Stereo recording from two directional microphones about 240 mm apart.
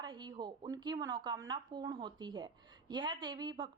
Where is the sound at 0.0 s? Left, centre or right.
Centre.